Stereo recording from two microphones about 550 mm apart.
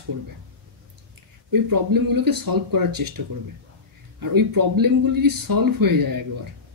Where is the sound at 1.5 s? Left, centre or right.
Right.